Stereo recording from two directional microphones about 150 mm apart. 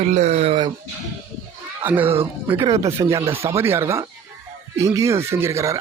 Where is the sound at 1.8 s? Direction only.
15° right (ahead or behind).